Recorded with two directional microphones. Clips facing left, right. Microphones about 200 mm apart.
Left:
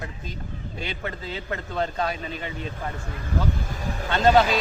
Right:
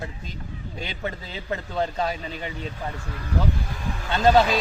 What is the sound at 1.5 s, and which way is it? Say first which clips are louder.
A man's voice: right 2 dB; 15° right (ahead or behind).